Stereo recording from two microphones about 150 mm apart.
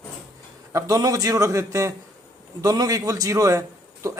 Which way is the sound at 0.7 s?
25° right (ahead or behind).